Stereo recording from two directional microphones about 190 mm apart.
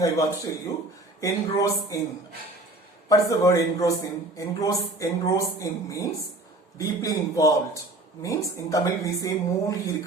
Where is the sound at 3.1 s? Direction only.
15° left (ahead or behind).